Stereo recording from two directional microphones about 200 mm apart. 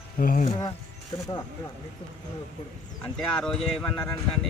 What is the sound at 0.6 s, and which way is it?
Speech, 20° left (ahead or behind).